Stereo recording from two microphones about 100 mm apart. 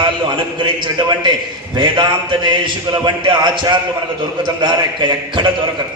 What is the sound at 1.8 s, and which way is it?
A man's voice, 55° right (ahead or behind).